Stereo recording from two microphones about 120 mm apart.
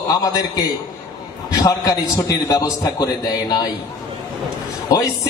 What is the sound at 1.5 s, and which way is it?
A man's voice, 30° left (ahead or behind).